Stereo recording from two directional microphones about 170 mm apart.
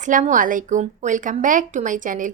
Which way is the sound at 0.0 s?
50° right (ahead or behind).